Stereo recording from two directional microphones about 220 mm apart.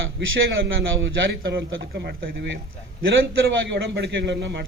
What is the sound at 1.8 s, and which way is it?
Speech, 50° right (ahead or behind).